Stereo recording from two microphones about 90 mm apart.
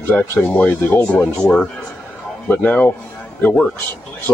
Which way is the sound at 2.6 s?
15° left (ahead or behind).